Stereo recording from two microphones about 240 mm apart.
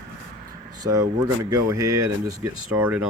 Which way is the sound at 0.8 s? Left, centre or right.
Centre.